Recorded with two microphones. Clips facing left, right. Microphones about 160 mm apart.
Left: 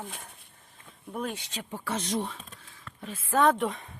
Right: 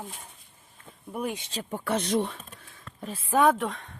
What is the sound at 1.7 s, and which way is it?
Speech, 60° right (ahead or behind).